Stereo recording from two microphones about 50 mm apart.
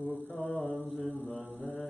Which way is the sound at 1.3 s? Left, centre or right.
Left.